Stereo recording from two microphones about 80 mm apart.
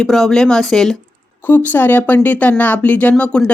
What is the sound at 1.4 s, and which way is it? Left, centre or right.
Speech, left.